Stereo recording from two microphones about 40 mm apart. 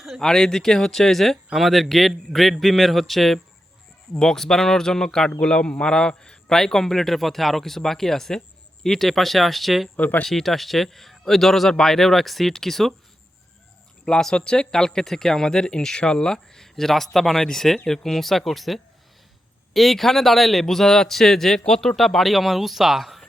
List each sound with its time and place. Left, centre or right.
0.2 s a man's voice: centre
10.0 s speech: left
10.2 s a man's voice: centre
14.0 s a man's voice: centre